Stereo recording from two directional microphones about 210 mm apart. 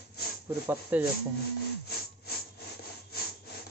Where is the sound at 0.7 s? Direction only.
10° right (ahead or behind).